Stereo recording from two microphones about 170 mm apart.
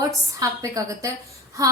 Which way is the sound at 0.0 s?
20° right (ahead or behind).